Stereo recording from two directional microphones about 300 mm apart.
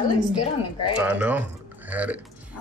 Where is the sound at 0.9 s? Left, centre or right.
Centre.